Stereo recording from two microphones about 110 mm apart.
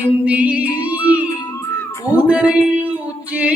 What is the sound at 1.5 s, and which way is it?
Music, 25° left (ahead or behind).